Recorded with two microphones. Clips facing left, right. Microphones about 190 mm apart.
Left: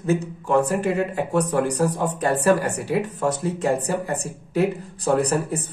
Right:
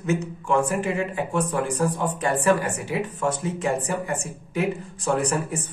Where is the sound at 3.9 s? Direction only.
35° left (ahead or behind).